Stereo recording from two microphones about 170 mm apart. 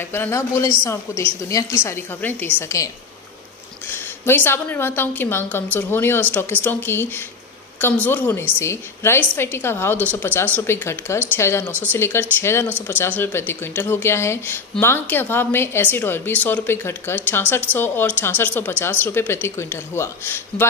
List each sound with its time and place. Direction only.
0.1 s a woman's voice: 10° left (ahead or behind)
3.9 s speech: 15° left (ahead or behind)